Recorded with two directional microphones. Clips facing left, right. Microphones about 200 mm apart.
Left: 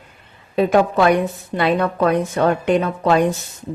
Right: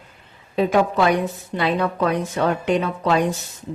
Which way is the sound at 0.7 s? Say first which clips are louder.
Left 3 dB; 55° left (ahead or behind).